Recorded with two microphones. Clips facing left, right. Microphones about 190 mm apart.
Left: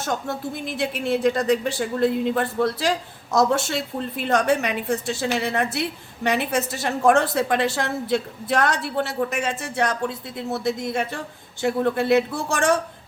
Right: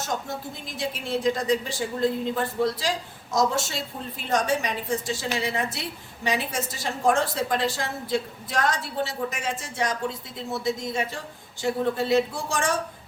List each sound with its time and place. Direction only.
0.0 s a woman's voice: 60° left (ahead or behind)